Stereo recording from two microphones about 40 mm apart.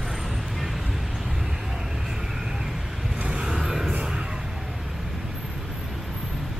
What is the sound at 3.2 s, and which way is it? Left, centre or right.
Vehicle, centre.